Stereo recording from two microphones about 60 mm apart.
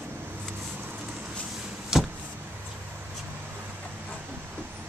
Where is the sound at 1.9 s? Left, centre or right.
Centre.